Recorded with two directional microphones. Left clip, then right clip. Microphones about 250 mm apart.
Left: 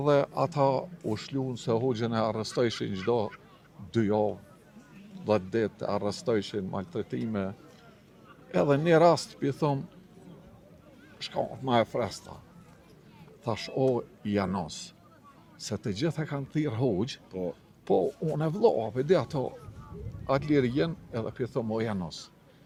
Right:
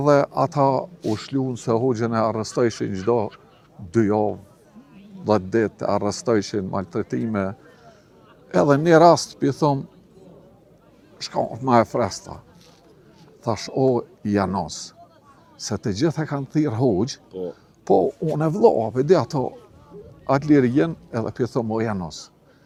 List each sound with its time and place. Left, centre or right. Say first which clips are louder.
0.0 s speech: right 8 dB; right
11.3 s speech: right 9 dB; right
13.4 s speech: right 7 dB; right